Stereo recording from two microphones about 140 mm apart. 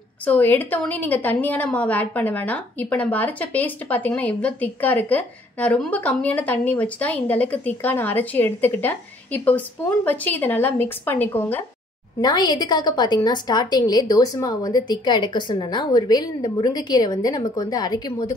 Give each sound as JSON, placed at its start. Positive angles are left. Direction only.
{"t": 0.2, "sound": "a woman's voice", "side_deg": 10}
{"t": 12.2, "sound": "a woman's voice", "side_deg": 30}